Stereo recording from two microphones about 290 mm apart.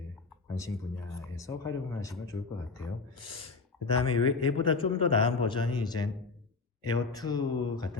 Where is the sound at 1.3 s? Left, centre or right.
Centre.